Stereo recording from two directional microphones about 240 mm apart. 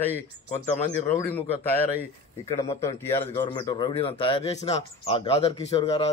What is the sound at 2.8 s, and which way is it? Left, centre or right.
A man's voice, centre.